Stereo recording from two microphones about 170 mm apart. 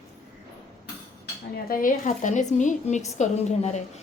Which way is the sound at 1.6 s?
55° left (ahead or behind).